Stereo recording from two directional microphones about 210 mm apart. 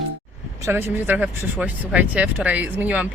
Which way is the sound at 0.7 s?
10° right (ahead or behind).